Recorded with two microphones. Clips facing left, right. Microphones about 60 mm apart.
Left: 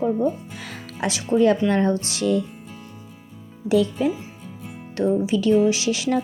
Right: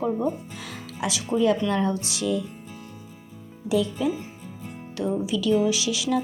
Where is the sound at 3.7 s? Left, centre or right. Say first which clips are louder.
Left 4 dB; left.